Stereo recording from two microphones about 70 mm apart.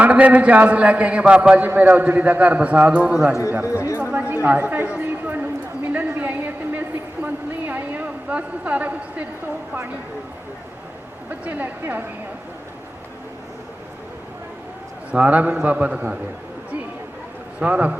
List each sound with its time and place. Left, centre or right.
0.0 s a man's voice: right
3.7 s a woman's voice: left
3.9 s a man's voice: right
5.9 s a sound: right
11.3 s a man's voice: right
15.1 s a man's voice: right
17.6 s a man's voice: centre